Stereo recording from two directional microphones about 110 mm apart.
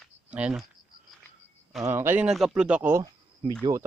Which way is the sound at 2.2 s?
5° right (ahead or behind).